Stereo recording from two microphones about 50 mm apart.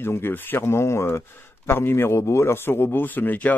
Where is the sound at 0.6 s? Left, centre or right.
Left.